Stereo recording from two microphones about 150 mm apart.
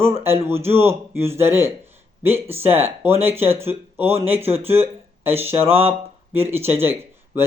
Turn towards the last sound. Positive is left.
turn(degrees=-15)  # may be behind; listen again after turning